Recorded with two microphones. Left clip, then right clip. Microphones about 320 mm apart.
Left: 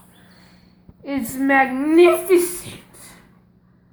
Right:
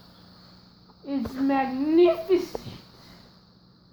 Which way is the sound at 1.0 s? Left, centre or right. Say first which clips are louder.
Left 6 dB; centre.